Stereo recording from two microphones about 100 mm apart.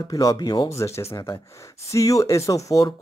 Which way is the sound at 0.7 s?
30° left (ahead or behind).